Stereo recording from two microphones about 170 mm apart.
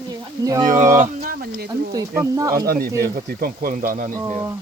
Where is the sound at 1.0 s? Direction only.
55° right (ahead or behind).